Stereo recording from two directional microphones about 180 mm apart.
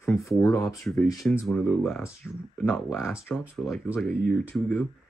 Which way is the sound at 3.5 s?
Centre (ahead or behind).